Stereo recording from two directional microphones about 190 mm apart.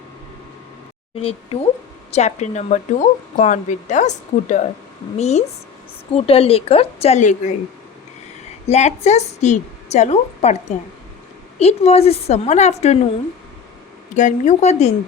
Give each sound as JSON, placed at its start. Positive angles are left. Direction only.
{"t": 1.1, "sound": "speech", "side_deg": 30}
{"t": 8.6, "sound": "speech", "side_deg": 35}
{"t": 14.2, "sound": "speech", "side_deg": 40}